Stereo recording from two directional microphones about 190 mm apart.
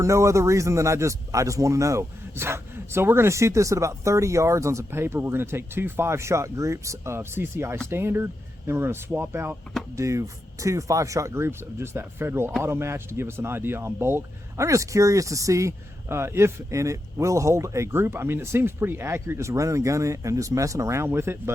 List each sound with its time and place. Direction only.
0.0 s speech: 15° right (ahead or behind)